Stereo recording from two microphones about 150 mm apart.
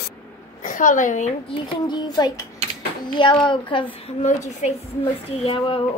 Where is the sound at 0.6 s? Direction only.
60° left (ahead or behind).